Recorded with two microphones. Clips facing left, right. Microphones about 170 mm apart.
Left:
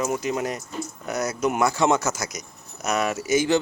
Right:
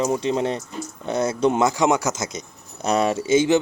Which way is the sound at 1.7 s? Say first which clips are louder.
Right 1 dB; 15° right (ahead or behind).